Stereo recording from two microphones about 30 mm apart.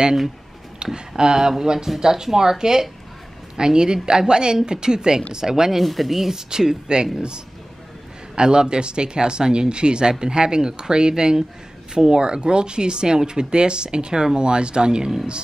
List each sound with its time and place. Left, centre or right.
0.9 s speech: right
5.8 s speech: centre
6.5 s speech: right